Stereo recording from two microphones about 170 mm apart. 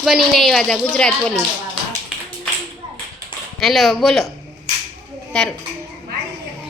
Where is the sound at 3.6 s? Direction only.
Centre (ahead or behind).